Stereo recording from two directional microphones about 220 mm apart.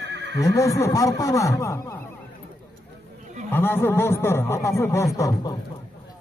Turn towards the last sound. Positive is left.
turn(degrees=15)  # may be behind; listen again after turning